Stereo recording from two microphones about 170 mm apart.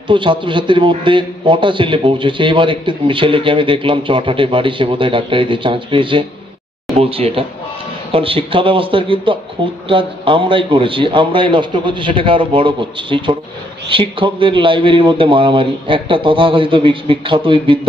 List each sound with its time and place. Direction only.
0.1 s a man's voice: 30° right (ahead or behind)